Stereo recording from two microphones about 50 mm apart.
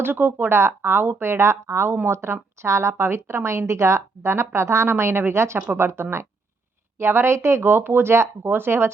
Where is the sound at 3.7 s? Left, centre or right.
Right.